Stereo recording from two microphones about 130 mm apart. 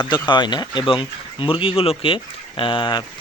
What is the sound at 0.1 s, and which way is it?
Speech, 35° left (ahead or behind).